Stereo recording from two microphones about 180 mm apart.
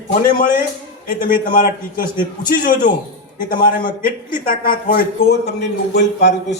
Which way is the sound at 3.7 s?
50° left (ahead or behind).